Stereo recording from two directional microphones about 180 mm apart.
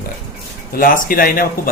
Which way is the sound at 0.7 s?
50° left (ahead or behind).